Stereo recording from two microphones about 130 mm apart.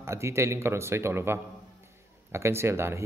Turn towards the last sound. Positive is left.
turn(degrees=-20)  # may be behind; listen again after turning